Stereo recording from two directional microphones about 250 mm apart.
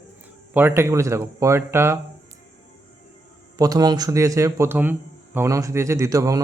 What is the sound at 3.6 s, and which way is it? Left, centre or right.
Speech, centre.